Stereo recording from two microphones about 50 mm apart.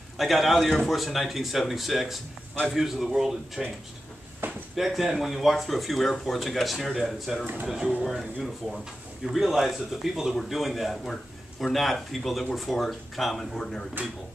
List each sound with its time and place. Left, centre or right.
0.2 s speech: centre
4.4 s a sound: right
4.7 s speech: centre
14.0 s speech: right